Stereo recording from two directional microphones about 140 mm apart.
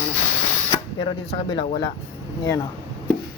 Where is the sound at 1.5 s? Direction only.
35° left (ahead or behind).